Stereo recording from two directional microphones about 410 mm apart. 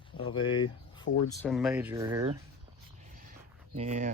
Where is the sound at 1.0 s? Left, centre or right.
Left.